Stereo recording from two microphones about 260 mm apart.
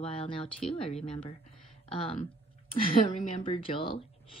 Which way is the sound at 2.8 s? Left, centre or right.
Left.